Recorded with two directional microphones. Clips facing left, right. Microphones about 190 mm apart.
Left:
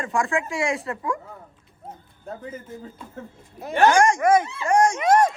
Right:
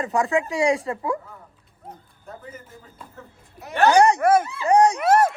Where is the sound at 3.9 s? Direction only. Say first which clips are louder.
Right 3 dB; 35° right (ahead or behind).